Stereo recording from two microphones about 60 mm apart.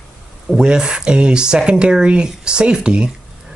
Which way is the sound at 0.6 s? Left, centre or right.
Centre.